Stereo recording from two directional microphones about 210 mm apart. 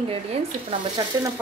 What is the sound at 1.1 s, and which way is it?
Speech, 20° right (ahead or behind).